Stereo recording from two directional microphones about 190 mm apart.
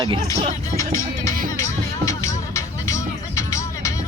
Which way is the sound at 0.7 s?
15° left (ahead or behind).